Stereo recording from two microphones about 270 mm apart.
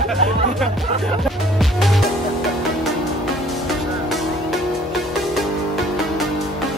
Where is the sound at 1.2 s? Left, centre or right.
Centre.